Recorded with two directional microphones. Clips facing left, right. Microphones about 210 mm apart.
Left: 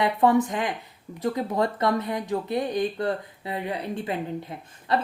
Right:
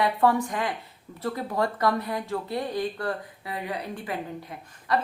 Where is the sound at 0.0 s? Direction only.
20° left (ahead or behind).